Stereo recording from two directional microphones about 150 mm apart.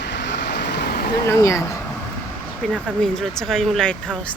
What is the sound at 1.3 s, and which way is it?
Speech, 20° left (ahead or behind).